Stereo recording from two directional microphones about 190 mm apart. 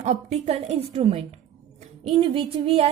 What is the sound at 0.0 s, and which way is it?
Speech, 35° right (ahead or behind).